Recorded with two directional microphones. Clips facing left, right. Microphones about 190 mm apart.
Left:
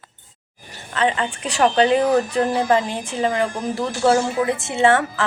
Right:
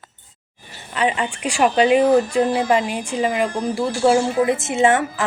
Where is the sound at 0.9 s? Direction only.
15° right (ahead or behind).